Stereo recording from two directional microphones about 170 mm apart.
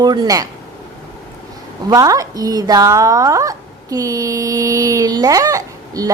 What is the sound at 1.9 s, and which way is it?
Speech, 20° right (ahead or behind).